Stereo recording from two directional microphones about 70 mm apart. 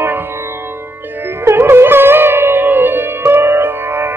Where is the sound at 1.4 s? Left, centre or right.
Right.